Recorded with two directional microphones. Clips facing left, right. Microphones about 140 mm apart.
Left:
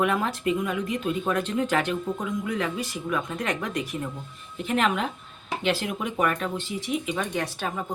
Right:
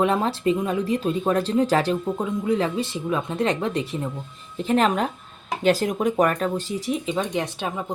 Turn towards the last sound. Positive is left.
turn(degrees=-20)  # may be behind; listen again after turning